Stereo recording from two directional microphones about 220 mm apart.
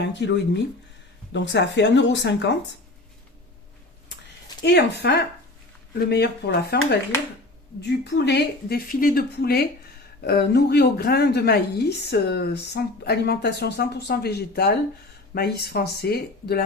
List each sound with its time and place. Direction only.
0.0 s a woman's voice: 55° left (ahead or behind)
4.6 s a woman's voice: 50° left (ahead or behind)